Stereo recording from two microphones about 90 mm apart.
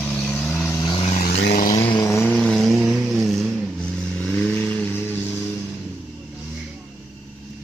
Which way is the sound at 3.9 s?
15° left (ahead or behind).